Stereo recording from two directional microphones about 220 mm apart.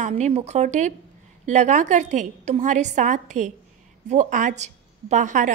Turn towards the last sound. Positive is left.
turn(degrees=-35)  # may be behind; listen again after turning